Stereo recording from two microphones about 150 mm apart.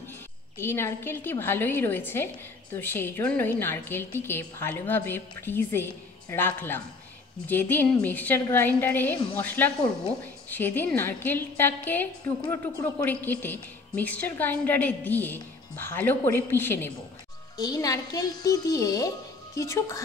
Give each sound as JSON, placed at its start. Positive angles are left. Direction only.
{"t": 0.6, "sound": "a woman's voice", "side_deg": 15}
{"t": 17.6, "sound": "a woman's voice", "side_deg": 25}